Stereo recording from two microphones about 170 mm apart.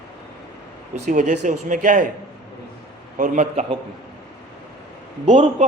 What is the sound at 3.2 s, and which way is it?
Speech, 45° right (ahead or behind).